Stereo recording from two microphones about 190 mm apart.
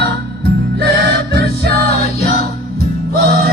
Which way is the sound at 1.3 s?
60° right (ahead or behind).